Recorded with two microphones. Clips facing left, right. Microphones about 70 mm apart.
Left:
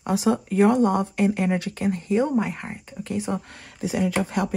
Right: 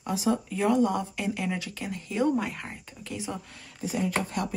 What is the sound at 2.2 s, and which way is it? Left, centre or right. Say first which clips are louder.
Speech: right 1 dB; left.